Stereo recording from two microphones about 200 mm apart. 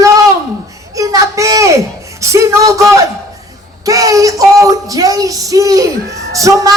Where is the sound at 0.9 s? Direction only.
15° right (ahead or behind).